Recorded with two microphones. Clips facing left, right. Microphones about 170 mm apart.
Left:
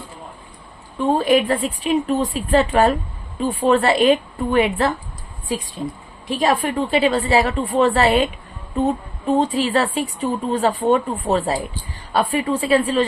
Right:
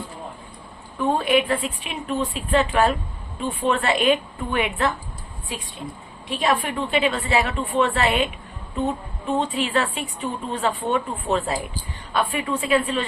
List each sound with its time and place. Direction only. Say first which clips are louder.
0.9 s speech: left 4 dB; 35° left (ahead or behind)
6.2 s speech: left 4 dB; 40° left (ahead or behind)